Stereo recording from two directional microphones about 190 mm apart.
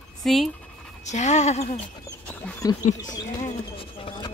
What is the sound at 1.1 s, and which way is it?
Speech, 40° left (ahead or behind).